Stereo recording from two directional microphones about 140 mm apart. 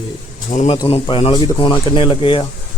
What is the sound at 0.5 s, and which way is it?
Speech, 50° left (ahead or behind).